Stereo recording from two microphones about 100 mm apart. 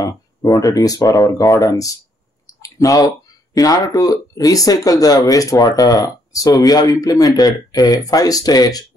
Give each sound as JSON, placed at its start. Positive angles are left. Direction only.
{"t": 0.0, "sound": "speech", "side_deg": 40}
{"t": 2.4, "sound": "clicking", "side_deg": 35}
{"t": 3.5, "sound": "speech", "side_deg": 40}